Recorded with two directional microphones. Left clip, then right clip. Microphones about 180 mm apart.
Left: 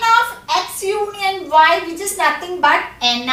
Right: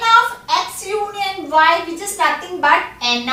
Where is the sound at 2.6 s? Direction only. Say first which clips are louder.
Even; 15° right (ahead or behind).